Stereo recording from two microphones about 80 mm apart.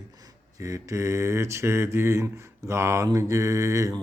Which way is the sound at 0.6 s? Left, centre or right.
Right.